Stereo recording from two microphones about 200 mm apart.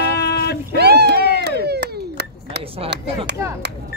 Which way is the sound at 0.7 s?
55° right (ahead or behind).